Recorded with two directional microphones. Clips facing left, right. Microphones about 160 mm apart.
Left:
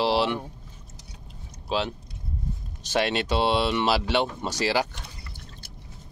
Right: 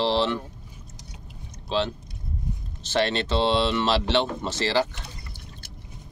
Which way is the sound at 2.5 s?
15° right (ahead or behind).